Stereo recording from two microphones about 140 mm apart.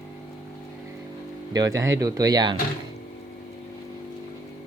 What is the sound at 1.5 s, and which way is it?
Speech, 25° right (ahead or behind).